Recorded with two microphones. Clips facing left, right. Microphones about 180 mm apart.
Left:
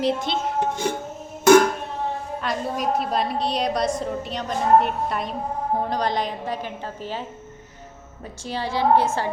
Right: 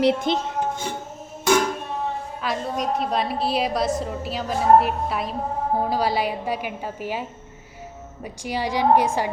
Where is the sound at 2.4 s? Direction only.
Centre (ahead or behind).